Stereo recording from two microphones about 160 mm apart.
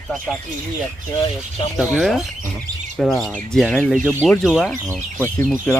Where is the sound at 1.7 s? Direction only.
Centre (ahead or behind).